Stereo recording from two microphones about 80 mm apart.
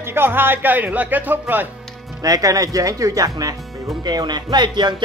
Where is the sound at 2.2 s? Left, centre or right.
Right.